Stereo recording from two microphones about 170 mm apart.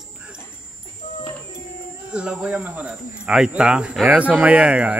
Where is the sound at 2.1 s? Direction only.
5° right (ahead or behind).